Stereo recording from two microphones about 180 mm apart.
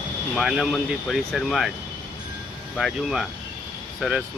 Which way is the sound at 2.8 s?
Centre (ahead or behind).